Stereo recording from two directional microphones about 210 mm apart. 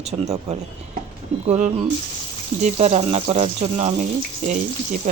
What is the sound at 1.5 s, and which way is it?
Speech, 35° right (ahead or behind).